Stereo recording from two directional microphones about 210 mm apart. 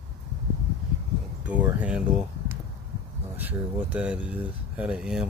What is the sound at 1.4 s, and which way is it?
Speech, 5° right (ahead or behind).